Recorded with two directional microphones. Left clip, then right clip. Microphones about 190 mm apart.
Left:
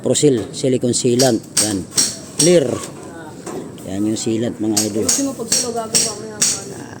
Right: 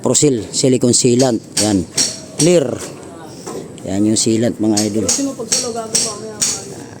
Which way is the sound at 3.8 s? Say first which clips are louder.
Right 5 dB; 40° right (ahead or behind).